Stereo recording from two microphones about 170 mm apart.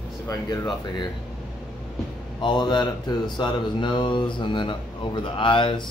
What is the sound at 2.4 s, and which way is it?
Speech, 25° left (ahead or behind).